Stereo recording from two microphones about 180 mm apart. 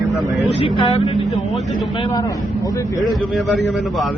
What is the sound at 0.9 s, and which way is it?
Speech, 35° left (ahead or behind).